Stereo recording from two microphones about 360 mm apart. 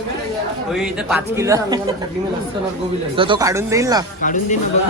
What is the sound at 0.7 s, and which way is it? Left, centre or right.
Speech, centre.